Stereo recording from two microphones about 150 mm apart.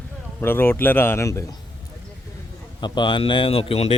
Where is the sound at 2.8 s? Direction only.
30° left (ahead or behind).